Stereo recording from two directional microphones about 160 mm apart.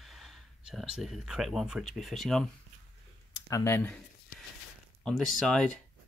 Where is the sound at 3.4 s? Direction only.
20° left (ahead or behind).